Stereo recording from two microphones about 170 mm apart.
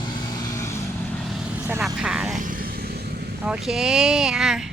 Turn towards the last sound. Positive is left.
turn(degrees=0)  # may be behind; listen again after turning